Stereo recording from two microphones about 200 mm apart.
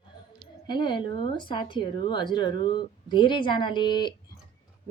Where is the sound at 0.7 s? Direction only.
25° left (ahead or behind).